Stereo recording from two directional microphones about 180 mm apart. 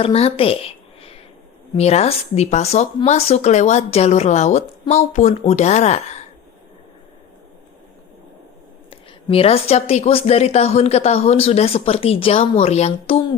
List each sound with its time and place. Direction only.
0.0 s a woman's voice: 35° left (ahead or behind)
8.9 s speech: 30° left (ahead or behind)